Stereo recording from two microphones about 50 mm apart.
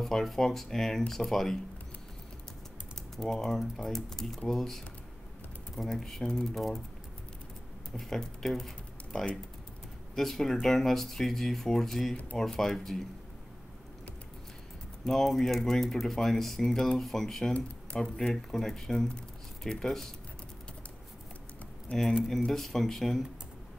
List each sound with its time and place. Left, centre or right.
0.0 s speech: centre
3.2 s speech: centre
7.9 s speech: centre
15.0 s speech: centre
17.6 s speech: left
18.3 s speech: centre
21.9 s speech: left
22.5 s speech: centre